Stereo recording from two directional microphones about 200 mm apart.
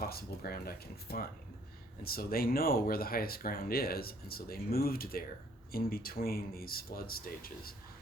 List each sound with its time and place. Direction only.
0.0 s speech: 50° left (ahead or behind)